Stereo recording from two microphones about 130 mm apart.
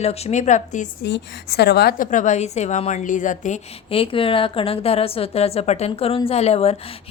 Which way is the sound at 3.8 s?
45° left (ahead or behind).